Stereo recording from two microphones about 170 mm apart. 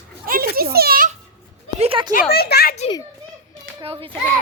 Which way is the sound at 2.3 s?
65° left (ahead or behind).